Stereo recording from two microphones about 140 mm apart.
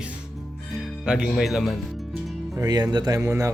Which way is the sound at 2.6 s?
30° right (ahead or behind).